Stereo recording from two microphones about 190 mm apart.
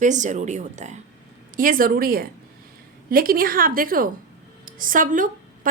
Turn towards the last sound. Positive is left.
turn(degrees=-45)  # may be behind; listen again after turning